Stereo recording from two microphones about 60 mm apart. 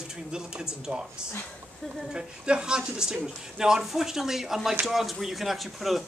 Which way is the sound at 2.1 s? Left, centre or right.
Centre.